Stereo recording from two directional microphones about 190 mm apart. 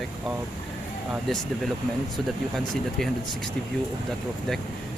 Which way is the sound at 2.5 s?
Centre (ahead or behind).